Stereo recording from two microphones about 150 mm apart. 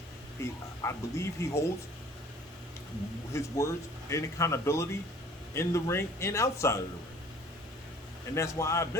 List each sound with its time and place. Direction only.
0.4 s speech: 20° left (ahead or behind)
3.3 s speech: 20° left (ahead or behind)
8.4 s speech: 20° left (ahead or behind)